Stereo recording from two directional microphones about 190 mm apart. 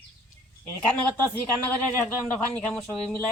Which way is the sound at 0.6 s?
10° left (ahead or behind).